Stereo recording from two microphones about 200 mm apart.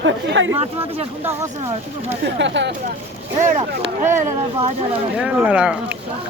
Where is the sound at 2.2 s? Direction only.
65° right (ahead or behind).